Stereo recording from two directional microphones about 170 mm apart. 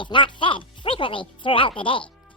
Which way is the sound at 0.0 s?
30° left (ahead or behind).